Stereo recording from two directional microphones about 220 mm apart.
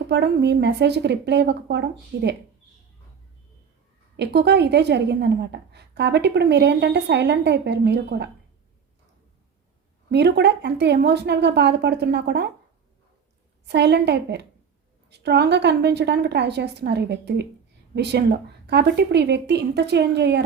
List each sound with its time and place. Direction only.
0.1 s a woman's voice: 50° right (ahead or behind)
4.2 s a woman's voice: 50° right (ahead or behind)
10.1 s a woman's voice: 50° right (ahead or behind)
13.7 s a woman's voice: 50° right (ahead or behind)